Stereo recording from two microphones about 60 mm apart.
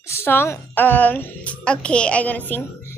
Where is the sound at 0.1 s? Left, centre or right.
Left.